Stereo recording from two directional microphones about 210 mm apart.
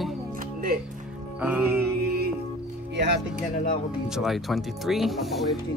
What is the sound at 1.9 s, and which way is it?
Music, 50° right (ahead or behind).